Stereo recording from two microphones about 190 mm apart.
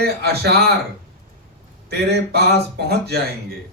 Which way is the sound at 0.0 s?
55° right (ahead or behind).